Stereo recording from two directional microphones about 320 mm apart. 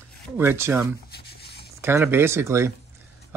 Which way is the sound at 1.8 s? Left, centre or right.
Centre.